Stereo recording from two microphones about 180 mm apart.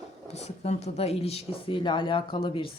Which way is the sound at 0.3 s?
35° left (ahead or behind).